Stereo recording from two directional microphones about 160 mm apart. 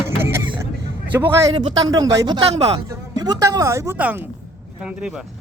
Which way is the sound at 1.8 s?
25° right (ahead or behind).